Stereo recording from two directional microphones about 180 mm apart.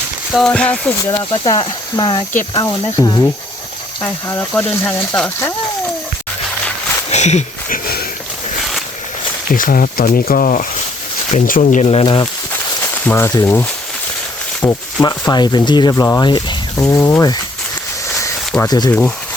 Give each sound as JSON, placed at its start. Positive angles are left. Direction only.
{"t": 0.3, "sound": "speech", "side_deg": 5}
{"t": 1.1, "sound": "speech", "side_deg": 25}
{"t": 7.1, "sound": "a sound", "side_deg": 40}
{"t": 9.5, "sound": "speech", "side_deg": 50}
{"t": 12.8, "sound": "speech", "side_deg": 10}
{"t": 18.7, "sound": "speech", "side_deg": 20}